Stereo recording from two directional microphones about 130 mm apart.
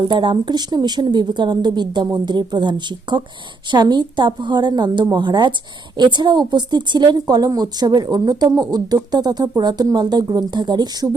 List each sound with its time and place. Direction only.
0.1 s a woman's voice: 40° right (ahead or behind)